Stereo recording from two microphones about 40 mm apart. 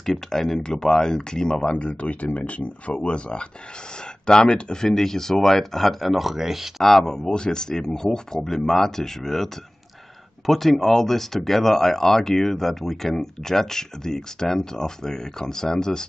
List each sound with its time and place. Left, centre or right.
0.0 s speech: centre
4.8 s speech: centre
6.8 s speech: centre